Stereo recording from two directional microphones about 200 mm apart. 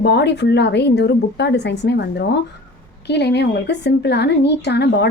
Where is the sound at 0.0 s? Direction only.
55° left (ahead or behind).